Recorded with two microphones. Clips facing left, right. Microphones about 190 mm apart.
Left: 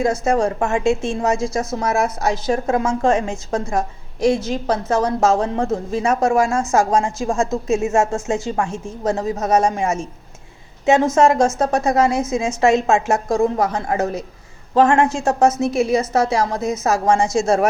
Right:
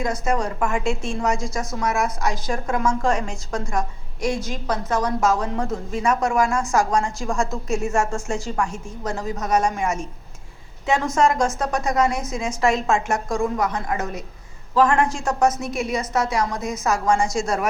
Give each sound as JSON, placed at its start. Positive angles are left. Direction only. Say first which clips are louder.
{"t": 0.0, "sound": "a woman's voice", "louder": "left 6 dB", "side_deg": 25}